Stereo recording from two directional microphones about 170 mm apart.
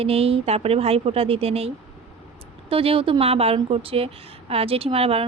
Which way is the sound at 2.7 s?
35° right (ahead or behind).